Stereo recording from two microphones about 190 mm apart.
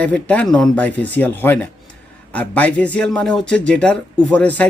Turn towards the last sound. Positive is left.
turn(degrees=10)  # may be behind; listen again after turning